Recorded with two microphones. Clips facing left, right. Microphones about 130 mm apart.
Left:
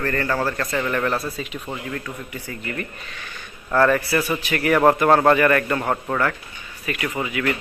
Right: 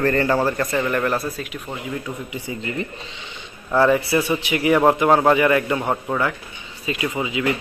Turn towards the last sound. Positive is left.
turn(degrees=-20)  # may be behind; listen again after turning